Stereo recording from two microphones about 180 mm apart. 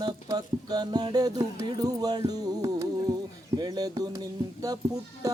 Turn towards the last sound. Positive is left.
turn(degrees=-20)  # may be behind; listen again after turning